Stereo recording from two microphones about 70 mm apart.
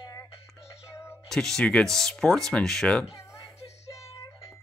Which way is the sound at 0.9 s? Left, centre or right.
Left.